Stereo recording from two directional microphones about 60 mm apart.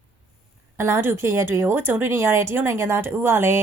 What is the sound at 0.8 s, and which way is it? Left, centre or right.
A woman's voice, right.